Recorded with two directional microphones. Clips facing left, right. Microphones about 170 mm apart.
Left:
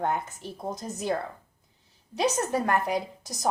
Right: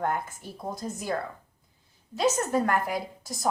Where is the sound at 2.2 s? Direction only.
15° left (ahead or behind).